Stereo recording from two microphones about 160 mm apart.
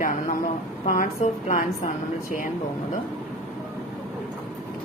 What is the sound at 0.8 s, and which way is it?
Speech, 60° left (ahead or behind).